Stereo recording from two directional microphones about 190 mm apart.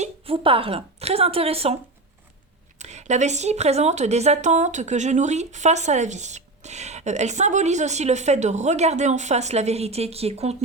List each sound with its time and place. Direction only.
0.0 s a woman's voice: 30° right (ahead or behind)